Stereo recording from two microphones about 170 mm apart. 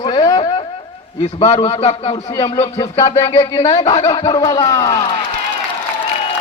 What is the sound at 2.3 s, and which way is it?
A man's voice, 20° left (ahead or behind).